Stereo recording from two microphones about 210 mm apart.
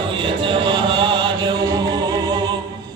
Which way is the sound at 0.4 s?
20° right (ahead or behind).